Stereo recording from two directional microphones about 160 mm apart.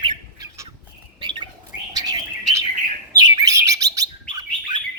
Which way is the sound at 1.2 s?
30° right (ahead or behind).